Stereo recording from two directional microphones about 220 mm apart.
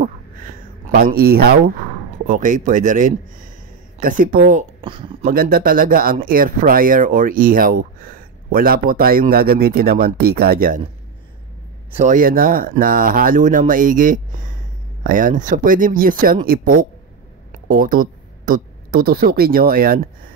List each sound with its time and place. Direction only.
0.0 s a sound: 40° right (ahead or behind)
2.2 s speech: 35° right (ahead or behind)
4.8 s speech: 25° right (ahead or behind)
5.2 s speech: 40° right (ahead or behind)
12.0 s speech: 35° right (ahead or behind)